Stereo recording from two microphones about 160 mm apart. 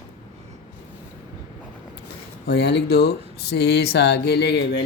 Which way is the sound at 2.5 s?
90° left.